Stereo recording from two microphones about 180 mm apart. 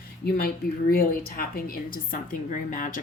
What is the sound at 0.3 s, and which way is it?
A woman's voice, 55° left (ahead or behind).